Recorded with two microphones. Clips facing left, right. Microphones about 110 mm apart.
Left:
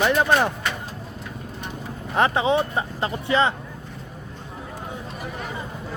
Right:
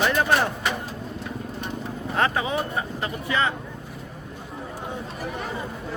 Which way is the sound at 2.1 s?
20° left (ahead or behind).